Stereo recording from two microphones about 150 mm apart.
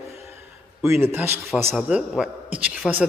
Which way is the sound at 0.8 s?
15° right (ahead or behind).